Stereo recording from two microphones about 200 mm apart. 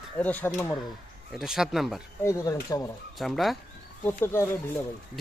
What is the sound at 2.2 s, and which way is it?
Speech, 15° left (ahead or behind).